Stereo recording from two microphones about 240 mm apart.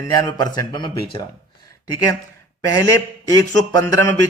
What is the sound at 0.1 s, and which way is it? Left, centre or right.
Speech, centre.